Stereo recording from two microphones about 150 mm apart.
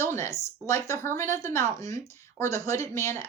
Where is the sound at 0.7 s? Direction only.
20° left (ahead or behind).